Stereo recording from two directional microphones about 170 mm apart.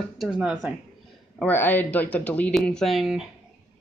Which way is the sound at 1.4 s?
10° left (ahead or behind).